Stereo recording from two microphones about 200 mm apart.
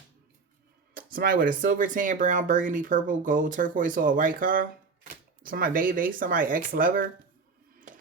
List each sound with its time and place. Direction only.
0.9 s speech: 45° right (ahead or behind)